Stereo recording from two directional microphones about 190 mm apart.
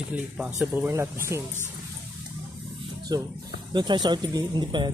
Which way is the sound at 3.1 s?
20° right (ahead or behind).